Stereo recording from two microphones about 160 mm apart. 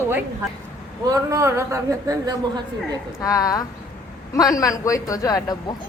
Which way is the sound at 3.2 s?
20° left (ahead or behind).